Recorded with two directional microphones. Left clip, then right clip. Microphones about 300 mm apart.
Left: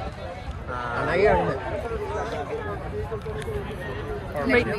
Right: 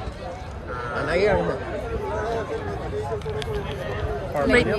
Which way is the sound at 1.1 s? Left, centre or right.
Left.